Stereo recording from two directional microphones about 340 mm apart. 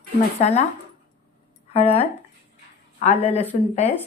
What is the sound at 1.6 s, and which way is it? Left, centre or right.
Speech, centre.